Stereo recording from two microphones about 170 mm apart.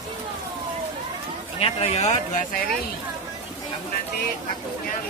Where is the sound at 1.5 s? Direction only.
35° left (ahead or behind).